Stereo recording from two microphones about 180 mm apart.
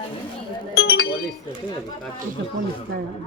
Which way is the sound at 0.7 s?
60° left (ahead or behind).